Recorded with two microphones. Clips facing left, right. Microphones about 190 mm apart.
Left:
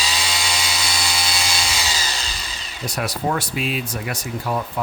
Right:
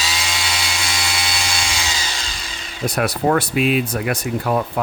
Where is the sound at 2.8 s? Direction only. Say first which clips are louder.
Right 5 dB; 55° right (ahead or behind).